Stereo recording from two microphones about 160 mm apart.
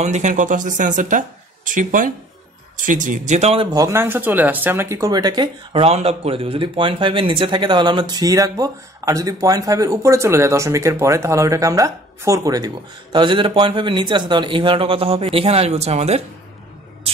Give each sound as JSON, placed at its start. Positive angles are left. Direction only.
{"t": 0.0, "sound": "speech", "side_deg": -45}
{"t": 3.7, "sound": "speech", "side_deg": -20}